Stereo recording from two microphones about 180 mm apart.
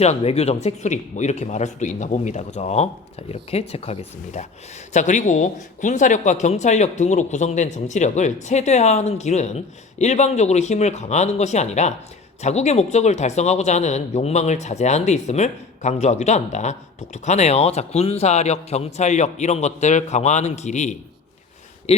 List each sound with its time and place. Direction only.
0.0 s speech: 35° left (ahead or behind)